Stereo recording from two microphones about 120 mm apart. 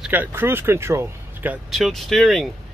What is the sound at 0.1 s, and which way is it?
Speech, 15° right (ahead or behind).